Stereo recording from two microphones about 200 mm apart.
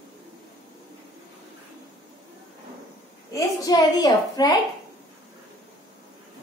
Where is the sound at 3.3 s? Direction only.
20° left (ahead or behind).